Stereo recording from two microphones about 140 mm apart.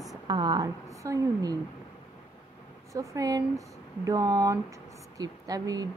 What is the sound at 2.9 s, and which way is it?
Speech, 25° right (ahead or behind).